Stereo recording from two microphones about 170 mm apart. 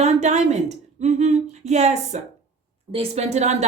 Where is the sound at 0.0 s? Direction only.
40° right (ahead or behind).